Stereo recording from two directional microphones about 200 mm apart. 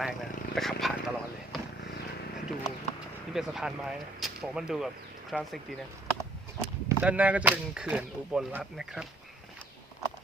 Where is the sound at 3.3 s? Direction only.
Centre (ahead or behind).